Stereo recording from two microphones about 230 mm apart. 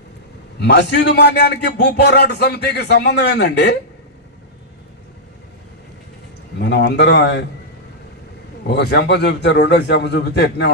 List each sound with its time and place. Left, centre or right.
0.6 s a man's voice: left
6.6 s a man's voice: left
8.6 s a man's voice: left